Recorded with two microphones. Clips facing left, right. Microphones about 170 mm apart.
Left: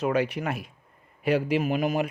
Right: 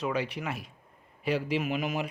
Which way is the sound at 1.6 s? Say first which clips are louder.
Left 5 dB; 40° left (ahead or behind).